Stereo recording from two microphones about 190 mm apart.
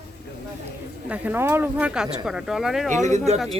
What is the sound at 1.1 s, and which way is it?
Speech, 10° right (ahead or behind).